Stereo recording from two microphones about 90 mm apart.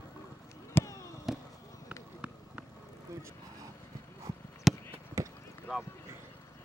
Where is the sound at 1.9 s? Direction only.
15° right (ahead or behind).